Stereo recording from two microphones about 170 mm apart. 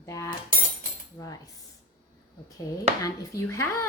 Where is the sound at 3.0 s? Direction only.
20° left (ahead or behind).